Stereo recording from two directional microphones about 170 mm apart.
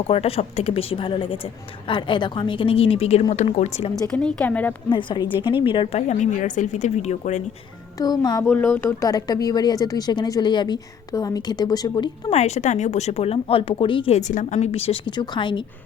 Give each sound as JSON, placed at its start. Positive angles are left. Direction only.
{"t": 0.1, "sound": "speech", "side_deg": 35}
{"t": 4.1, "sound": "a woman's voice", "side_deg": 5}
{"t": 4.9, "sound": "speech", "side_deg": 30}
{"t": 7.9, "sound": "speech", "side_deg": 25}
{"t": 8.4, "sound": "speech", "side_deg": 15}
{"t": 12.3, "sound": "speech", "side_deg": 40}